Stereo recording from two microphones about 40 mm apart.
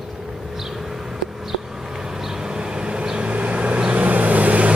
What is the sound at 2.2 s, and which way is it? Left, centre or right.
Vehicle, centre.